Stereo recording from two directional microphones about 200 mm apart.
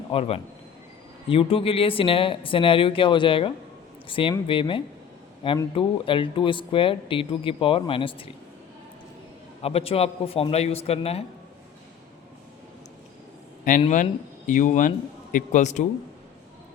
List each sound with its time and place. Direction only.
0.1 s speech: 30° left (ahead or behind)
9.6 s a man's voice: 30° left (ahead or behind)
13.7 s a man's voice: 40° left (ahead or behind)